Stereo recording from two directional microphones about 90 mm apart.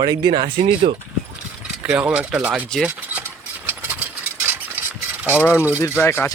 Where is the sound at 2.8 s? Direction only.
15° right (ahead or behind).